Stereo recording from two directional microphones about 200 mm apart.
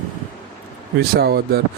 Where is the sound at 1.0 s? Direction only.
55° right (ahead or behind).